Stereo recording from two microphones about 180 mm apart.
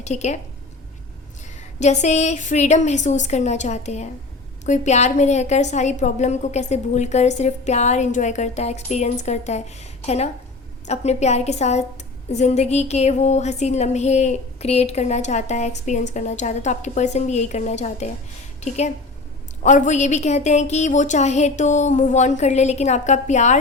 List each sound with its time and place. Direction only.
0.0 s a woman's voice: 40° left (ahead or behind)
1.5 s a woman's voice: 40° left (ahead or behind)
19.6 s a woman's voice: 40° left (ahead or behind)